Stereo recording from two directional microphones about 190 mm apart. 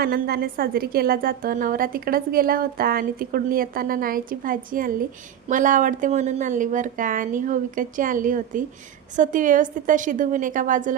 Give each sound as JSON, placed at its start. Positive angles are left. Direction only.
{"t": 0.0, "sound": "a woman's voice", "side_deg": -55}